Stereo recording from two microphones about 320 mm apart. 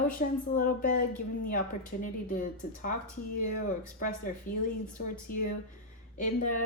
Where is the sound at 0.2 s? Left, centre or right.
Left.